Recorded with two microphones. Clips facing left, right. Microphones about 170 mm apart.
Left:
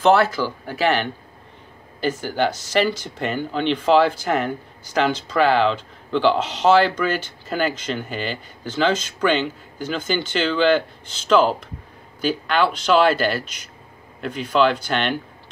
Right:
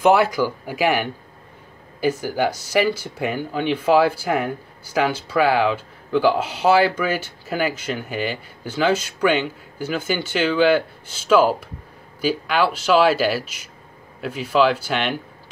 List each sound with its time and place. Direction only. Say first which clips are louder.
0.0 s speech: even; 15° right (ahead or behind)